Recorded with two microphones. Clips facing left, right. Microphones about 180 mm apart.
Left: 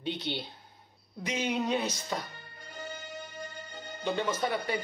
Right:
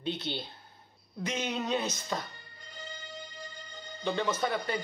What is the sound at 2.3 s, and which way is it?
Music, 50° left (ahead or behind).